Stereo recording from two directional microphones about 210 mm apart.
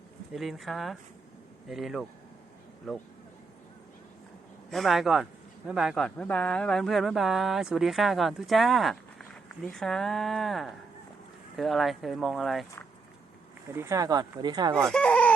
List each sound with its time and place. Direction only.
0.3 s a man's voice: centre (ahead or behind)
4.7 s a man's voice: centre (ahead or behind)
13.7 s speech: 15° right (ahead or behind)
14.8 s speech: 5° left (ahead or behind)